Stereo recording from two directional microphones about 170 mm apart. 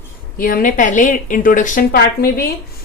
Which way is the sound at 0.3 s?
55° left (ahead or behind).